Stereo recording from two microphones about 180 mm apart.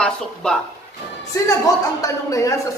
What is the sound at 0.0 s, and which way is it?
Speech, 5° left (ahead or behind).